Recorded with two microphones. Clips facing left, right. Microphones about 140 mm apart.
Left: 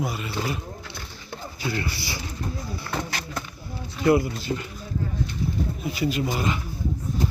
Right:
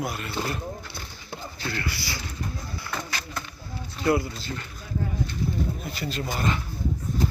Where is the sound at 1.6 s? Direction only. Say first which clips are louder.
Left 3 dB; 15° left (ahead or behind).